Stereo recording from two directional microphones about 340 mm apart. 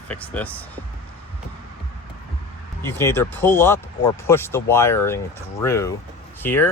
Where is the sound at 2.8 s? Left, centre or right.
Centre.